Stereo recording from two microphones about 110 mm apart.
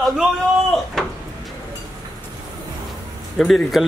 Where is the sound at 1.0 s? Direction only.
5° left (ahead or behind).